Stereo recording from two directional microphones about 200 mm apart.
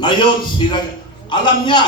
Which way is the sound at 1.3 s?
20° left (ahead or behind).